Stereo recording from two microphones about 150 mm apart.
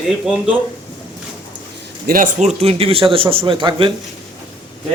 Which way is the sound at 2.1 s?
65° right (ahead or behind).